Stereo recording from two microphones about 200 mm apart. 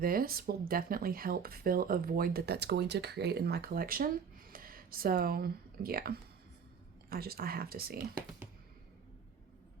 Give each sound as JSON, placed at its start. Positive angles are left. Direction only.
{"t": 0.0, "sound": "speech", "side_deg": -45}